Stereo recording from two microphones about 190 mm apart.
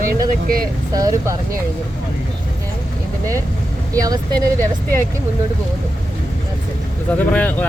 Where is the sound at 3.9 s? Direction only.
20° right (ahead or behind).